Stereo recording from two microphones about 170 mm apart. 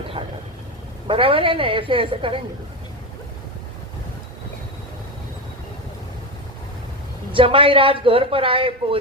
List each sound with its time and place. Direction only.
0.2 s vehicle: 30° right (ahead or behind)
1.0 s speech: 30° right (ahead or behind)
7.3 s speech: 30° right (ahead or behind)